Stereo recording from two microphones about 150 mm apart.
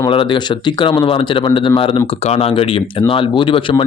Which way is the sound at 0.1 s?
35° left (ahead or behind).